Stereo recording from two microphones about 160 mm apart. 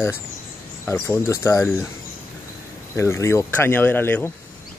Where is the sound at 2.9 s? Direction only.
15° left (ahead or behind).